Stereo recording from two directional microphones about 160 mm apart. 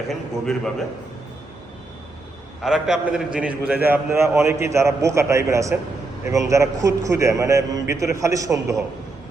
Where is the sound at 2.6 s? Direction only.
5° right (ahead or behind).